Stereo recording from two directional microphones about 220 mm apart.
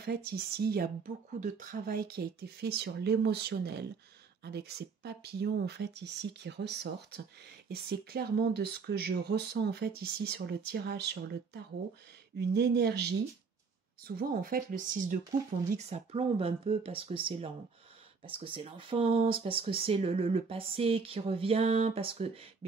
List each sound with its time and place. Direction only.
0.0 s speech: 45° right (ahead or behind); by 22.7 s 25° right (ahead or behind)